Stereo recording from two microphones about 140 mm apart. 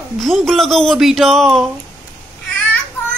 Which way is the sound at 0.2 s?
Centre (ahead or behind).